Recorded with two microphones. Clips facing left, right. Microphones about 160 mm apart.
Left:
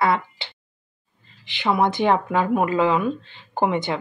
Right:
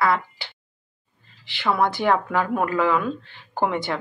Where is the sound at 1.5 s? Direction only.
20° left (ahead or behind).